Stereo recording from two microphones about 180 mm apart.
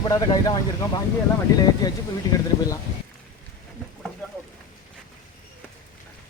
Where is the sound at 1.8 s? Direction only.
20° left (ahead or behind).